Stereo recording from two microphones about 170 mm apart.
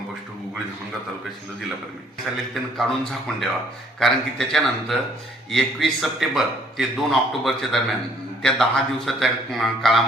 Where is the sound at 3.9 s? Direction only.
Centre (ahead or behind).